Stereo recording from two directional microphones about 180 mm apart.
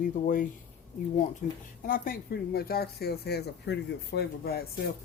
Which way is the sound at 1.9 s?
55° left (ahead or behind).